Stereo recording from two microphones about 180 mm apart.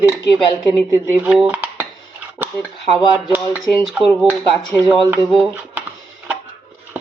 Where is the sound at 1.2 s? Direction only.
5° right (ahead or behind).